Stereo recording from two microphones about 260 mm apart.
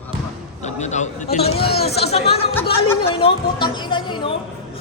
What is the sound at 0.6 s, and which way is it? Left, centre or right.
Speech, left.